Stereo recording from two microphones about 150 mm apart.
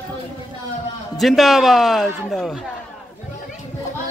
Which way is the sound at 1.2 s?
Centre (ahead or behind).